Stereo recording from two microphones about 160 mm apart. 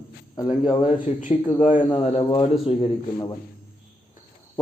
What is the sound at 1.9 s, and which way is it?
Speech, 30° left (ahead or behind).